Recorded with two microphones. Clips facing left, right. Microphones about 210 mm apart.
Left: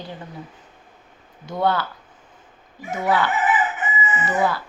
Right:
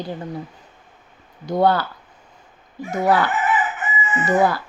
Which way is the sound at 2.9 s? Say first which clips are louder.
Right 3 dB; 40° right (ahead or behind).